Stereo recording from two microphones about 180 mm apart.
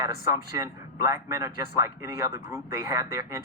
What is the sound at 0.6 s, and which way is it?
A man's voice, 15° right (ahead or behind).